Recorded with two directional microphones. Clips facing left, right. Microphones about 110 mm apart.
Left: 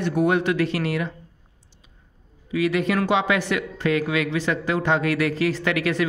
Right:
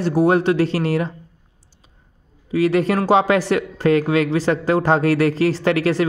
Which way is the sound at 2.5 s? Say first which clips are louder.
Right 5 dB; 35° right (ahead or behind).